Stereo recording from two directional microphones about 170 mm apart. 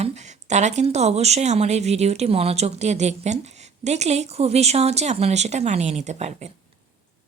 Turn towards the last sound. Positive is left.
turn(degrees=-40)  # may be behind; listen again after turning